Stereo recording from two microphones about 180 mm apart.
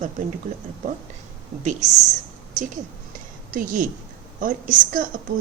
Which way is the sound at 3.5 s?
50° right (ahead or behind).